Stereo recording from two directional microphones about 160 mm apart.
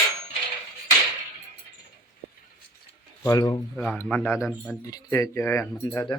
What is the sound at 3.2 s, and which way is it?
Speech, 20° left (ahead or behind).